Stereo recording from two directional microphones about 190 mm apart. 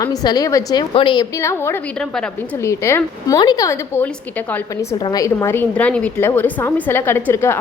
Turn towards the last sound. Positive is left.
turn(degrees=10)  # may be behind; listen again after turning